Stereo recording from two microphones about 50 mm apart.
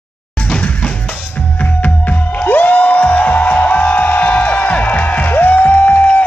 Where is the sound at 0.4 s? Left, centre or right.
Left.